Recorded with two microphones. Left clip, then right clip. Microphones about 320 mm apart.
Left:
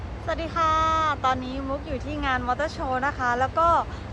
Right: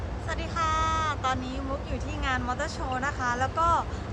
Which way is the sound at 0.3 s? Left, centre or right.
Centre.